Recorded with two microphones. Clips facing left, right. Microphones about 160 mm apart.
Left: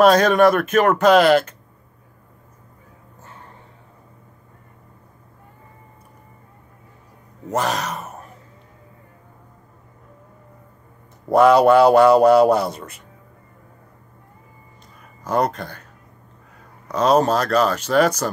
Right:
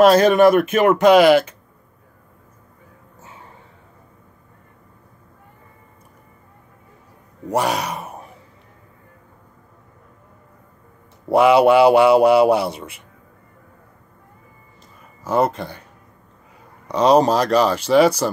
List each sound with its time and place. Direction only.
0.0 s a man's voice: 5° right (ahead or behind)
3.2 s a sound: 10° right (ahead or behind)
7.5 s speech: 10° right (ahead or behind)
11.2 s a man's voice: 10° right (ahead or behind)
15.2 s a man's voice: 5° right (ahead or behind)
17.2 s a man's voice: 10° right (ahead or behind)